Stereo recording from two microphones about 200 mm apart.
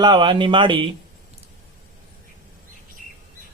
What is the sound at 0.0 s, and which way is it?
Speech, 25° right (ahead or behind).